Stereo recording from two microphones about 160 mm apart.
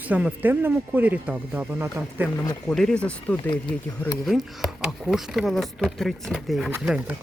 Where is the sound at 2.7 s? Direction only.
5° left (ahead or behind).